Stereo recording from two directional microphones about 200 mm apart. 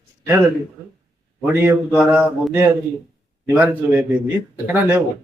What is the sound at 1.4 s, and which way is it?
Speech, 10° right (ahead or behind).